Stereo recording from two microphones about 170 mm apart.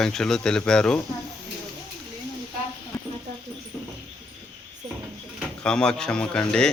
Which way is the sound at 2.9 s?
15° left (ahead or behind).